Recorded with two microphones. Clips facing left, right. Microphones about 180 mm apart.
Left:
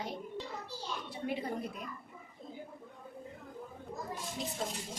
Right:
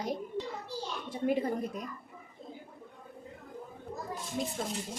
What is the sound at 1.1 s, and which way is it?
Speech, 45° right (ahead or behind).